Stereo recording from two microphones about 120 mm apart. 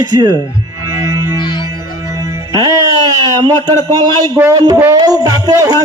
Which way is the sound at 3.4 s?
35° right (ahead or behind).